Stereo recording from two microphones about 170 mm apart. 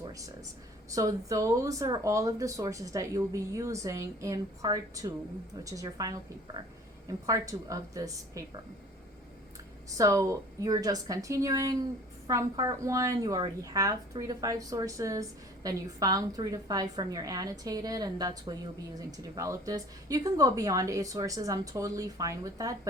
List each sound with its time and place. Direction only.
0.0 s a sound: 20° right (ahead or behind)
0.9 s a woman's voice: 20° right (ahead or behind)
10.0 s a woman's voice: 20° right (ahead or behind)